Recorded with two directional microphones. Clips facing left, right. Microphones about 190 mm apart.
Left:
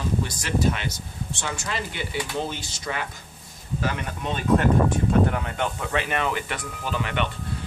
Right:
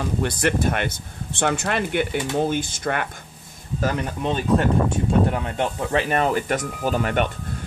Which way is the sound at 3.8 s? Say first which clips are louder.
Right 5 dB; 35° right (ahead or behind).